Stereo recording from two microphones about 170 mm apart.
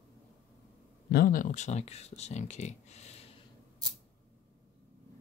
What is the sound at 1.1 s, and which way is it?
Speech, 55° left (ahead or behind).